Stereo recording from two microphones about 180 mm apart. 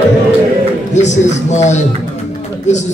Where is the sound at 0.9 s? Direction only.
40° left (ahead or behind).